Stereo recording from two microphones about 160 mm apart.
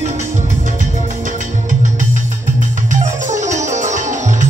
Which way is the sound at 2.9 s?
50° right (ahead or behind).